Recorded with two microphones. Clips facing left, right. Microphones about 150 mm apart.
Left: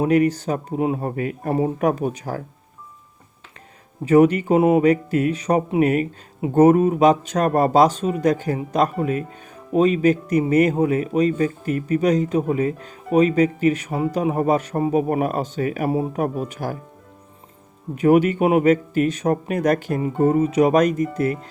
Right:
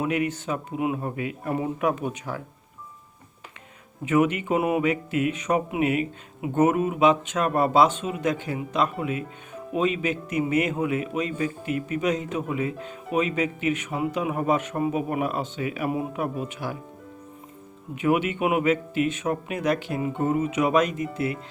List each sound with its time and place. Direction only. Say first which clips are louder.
0.0 s speech: left 8 dB; 40° left (ahead or behind)
4.0 s speech: left 7 dB; 35° left (ahead or behind)
17.9 s speech: left 8 dB; 40° left (ahead or behind)